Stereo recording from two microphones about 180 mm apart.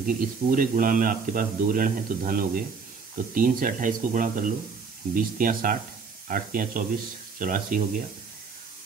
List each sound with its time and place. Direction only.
0.0 s a man's voice: 50° right (ahead or behind)